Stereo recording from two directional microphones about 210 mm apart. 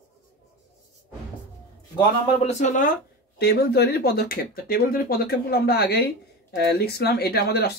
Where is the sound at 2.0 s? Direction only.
30° left (ahead or behind).